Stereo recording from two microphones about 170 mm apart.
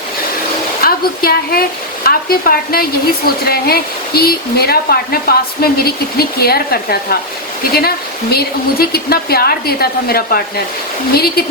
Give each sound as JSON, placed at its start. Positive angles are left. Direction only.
{"t": 0.8, "sound": "a woman's voice", "side_deg": 60}